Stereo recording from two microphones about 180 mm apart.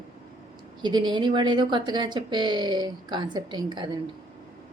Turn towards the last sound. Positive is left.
turn(degrees=-25)  # may be behind; listen again after turning